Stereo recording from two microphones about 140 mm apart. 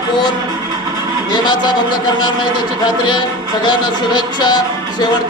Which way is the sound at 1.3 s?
30° left (ahead or behind).